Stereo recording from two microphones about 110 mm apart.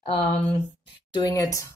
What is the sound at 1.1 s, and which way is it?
Speech, 35° left (ahead or behind).